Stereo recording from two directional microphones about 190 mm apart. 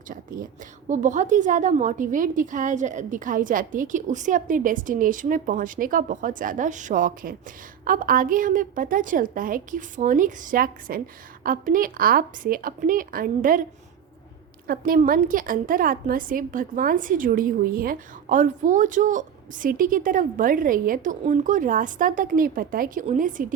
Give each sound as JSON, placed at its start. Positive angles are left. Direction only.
{"t": 0.1, "sound": "a woman's voice", "side_deg": -45}
{"t": 14.7, "sound": "a woman's voice", "side_deg": -50}